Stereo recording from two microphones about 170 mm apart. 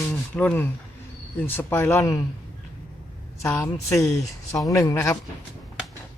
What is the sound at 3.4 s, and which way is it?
Speech, 15° left (ahead or behind).